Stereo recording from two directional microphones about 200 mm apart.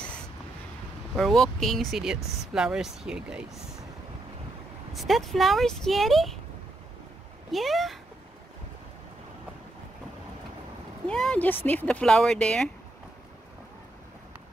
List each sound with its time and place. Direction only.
1.1 s speech: centre (ahead or behind)
4.9 s speech: centre (ahead or behind)
7.5 s speech: centre (ahead or behind)
11.1 s speech: 5° left (ahead or behind)